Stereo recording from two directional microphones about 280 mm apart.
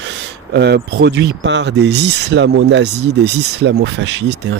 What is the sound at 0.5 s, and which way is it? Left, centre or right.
Speech, right.